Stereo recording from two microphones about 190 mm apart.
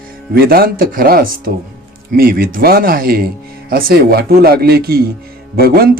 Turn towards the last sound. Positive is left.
turn(degrees=-50)  # may be behind; listen again after turning